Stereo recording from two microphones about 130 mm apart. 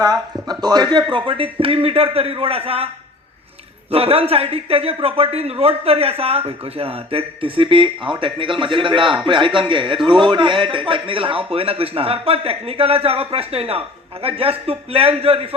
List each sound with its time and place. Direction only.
0.0 s speech: 30° right (ahead or behind); by 2.9 s 50° right (ahead or behind)
3.9 s speech: 50° right (ahead or behind)